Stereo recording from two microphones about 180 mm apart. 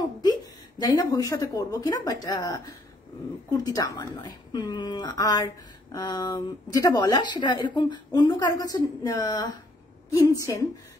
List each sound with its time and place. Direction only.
0.2 s a woman's voice: 20° left (ahead or behind)